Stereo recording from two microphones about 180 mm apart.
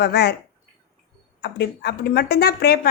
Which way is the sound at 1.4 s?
65° left (ahead or behind).